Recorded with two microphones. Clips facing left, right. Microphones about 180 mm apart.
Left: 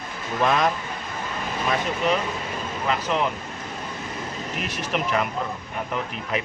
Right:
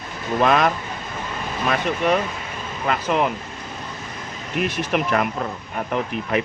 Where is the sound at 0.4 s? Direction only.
70° right (ahead or behind).